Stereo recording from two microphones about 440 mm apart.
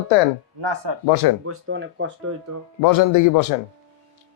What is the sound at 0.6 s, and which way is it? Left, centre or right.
Speech, right.